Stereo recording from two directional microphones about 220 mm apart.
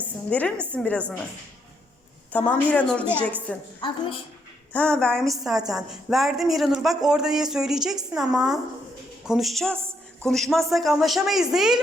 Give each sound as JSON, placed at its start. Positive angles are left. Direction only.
{"t": 0.3, "sound": "a woman's voice", "side_deg": 5}
{"t": 2.3, "sound": "a woman's voice", "side_deg": 5}
{"t": 3.8, "sound": "speech", "side_deg": 25}
{"t": 4.7, "sound": "a woman's voice", "side_deg": 5}